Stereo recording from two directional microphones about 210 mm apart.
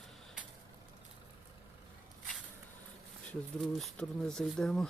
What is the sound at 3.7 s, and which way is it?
Speech, 5° left (ahead or behind).